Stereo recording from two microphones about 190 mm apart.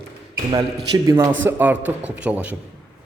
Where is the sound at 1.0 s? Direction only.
20° right (ahead or behind).